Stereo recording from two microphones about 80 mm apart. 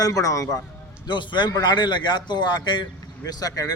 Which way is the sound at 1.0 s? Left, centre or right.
Left.